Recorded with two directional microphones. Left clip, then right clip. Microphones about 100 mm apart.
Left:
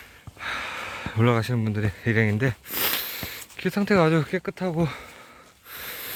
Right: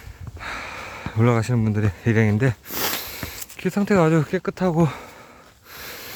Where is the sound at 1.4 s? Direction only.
40° right (ahead or behind).